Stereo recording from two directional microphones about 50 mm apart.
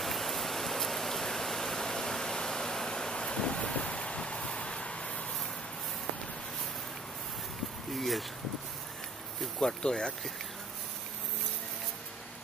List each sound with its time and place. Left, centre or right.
0.0 s pink noise: centre; by 5.2 s left
7.9 s speech: centre
9.6 s speech: centre